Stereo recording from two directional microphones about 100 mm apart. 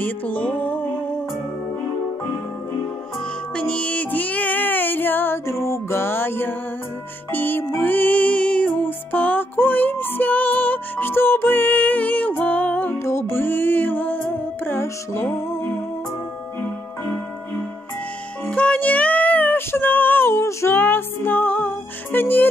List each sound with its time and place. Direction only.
0.0 s music: 15° left (ahead or behind)
3.5 s music: 10° left (ahead or behind)
13.0 s music: 25° left (ahead or behind)
18.5 s music: 10° left (ahead or behind)